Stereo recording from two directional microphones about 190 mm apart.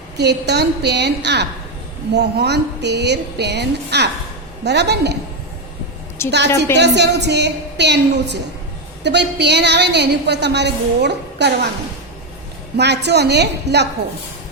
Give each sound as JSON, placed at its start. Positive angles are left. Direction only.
{"t": 0.2, "sound": "a woman's voice", "side_deg": -60}
{"t": 6.2, "sound": "a woman's voice", "side_deg": 15}
{"t": 6.7, "sound": "a woman's voice", "side_deg": -65}
{"t": 12.7, "sound": "a woman's voice", "side_deg": -60}